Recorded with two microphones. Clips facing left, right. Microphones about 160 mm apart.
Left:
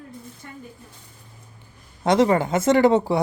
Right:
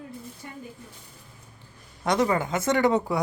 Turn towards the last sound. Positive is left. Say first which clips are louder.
# left 5 dB
turn(degrees=30)  # may be behind; listen again after turning